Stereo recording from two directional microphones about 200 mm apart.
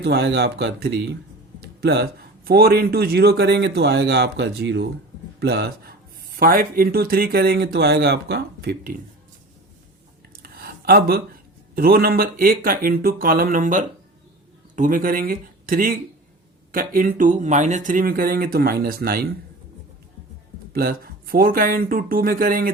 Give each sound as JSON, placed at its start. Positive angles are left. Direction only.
{"t": 0.0, "sound": "speech", "side_deg": -55}
{"t": 10.3, "sound": "a sound", "side_deg": -50}
{"t": 11.7, "sound": "speech", "side_deg": -50}
{"t": 20.7, "sound": "speech", "side_deg": -50}